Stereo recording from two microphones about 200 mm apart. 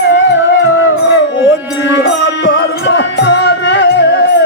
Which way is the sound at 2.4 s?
60° left (ahead or behind).